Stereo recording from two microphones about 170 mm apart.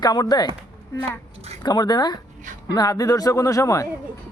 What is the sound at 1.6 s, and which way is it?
A man's voice, 25° left (ahead or behind).